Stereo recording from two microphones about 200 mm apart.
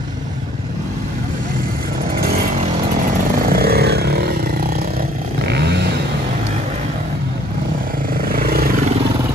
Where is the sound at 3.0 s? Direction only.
45° right (ahead or behind).